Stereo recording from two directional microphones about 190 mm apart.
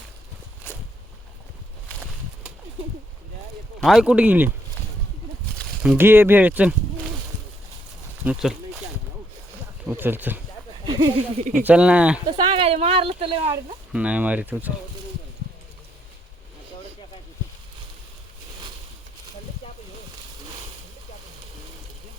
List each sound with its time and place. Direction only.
3.8 s speech: centre (ahead or behind)
5.8 s speech: 10° right (ahead or behind)
8.2 s speech: 5° right (ahead or behind)
9.8 s speech: 10° right (ahead or behind)
10.8 s a sound: 25° right (ahead or behind)
11.6 s speech: 5° right (ahead or behind)
12.4 s speech: 30° right (ahead or behind)
13.9 s speech: 5° right (ahead or behind)